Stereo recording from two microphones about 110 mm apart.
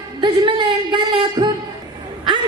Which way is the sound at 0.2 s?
45° right (ahead or behind).